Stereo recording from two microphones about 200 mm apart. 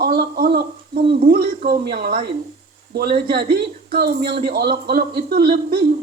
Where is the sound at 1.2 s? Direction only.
50° right (ahead or behind).